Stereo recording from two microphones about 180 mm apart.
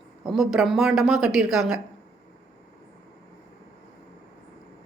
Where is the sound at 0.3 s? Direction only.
Centre (ahead or behind).